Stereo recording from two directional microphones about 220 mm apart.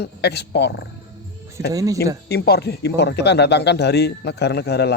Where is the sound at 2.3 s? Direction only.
45° left (ahead or behind).